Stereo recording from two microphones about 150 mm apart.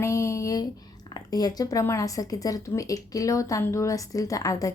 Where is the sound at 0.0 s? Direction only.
20° left (ahead or behind).